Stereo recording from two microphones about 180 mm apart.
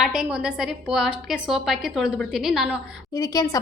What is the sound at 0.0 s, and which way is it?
A woman's voice, 5° right (ahead or behind).